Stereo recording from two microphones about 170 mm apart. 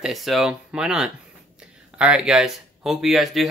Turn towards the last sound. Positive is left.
turn(degrees=0)  # may be behind; listen again after turning